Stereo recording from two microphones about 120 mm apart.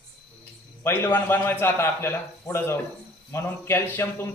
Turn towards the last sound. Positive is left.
turn(degrees=20)  # may be behind; listen again after turning